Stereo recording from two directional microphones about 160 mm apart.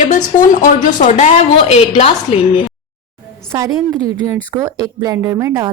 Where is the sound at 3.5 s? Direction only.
20° right (ahead or behind).